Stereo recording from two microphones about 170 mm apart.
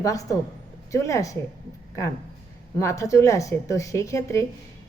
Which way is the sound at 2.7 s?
20° left (ahead or behind).